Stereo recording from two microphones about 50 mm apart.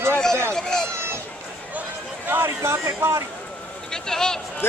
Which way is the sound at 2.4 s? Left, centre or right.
Right.